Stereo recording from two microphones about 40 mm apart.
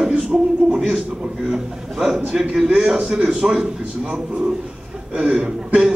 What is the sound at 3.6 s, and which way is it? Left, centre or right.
A man's voice, right.